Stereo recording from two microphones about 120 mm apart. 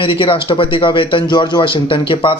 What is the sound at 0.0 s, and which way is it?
Speech, 45° left (ahead or behind).